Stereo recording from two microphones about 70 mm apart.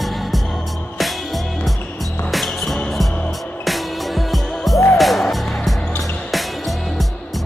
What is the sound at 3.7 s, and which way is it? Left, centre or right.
Music, centre.